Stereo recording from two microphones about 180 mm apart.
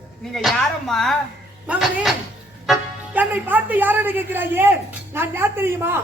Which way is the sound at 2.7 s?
10° right (ahead or behind).